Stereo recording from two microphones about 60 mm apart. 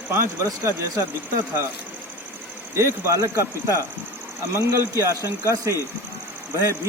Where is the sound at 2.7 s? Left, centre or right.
Right.